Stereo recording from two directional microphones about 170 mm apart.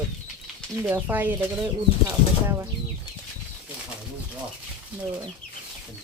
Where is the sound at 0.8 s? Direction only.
10° right (ahead or behind).